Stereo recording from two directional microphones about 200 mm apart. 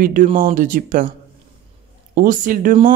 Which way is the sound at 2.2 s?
45° right (ahead or behind).